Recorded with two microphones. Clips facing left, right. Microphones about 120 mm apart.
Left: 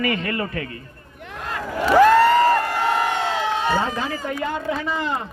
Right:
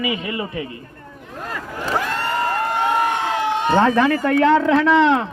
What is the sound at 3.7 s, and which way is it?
Speech, 70° right (ahead or behind).